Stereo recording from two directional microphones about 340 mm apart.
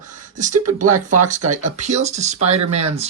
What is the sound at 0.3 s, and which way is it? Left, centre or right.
Speech, right.